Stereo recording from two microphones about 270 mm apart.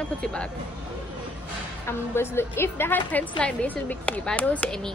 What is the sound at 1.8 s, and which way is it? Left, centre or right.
A woman's voice, centre.